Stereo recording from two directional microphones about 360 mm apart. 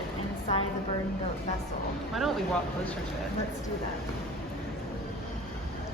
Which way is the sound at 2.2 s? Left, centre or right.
Centre.